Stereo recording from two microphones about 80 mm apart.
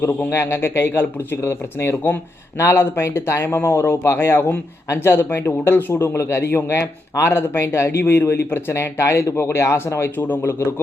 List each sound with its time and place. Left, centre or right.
0.0 s speech: left